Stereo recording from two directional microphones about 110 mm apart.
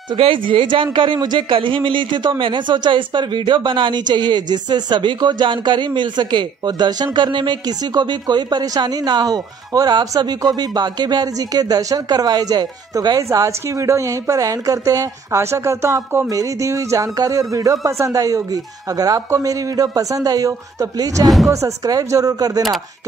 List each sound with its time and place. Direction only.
0.1 s a man's voice: 50° right (ahead or behind); by 22.6 s 35° right (ahead or behind)